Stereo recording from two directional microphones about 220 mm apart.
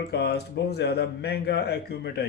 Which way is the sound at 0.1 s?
45° left (ahead or behind).